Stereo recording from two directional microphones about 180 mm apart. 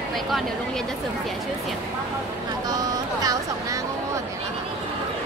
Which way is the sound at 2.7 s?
20° right (ahead or behind).